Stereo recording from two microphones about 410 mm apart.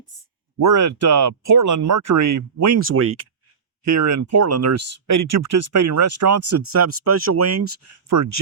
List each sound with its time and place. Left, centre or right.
0.6 s speech: right
3.8 s speech: right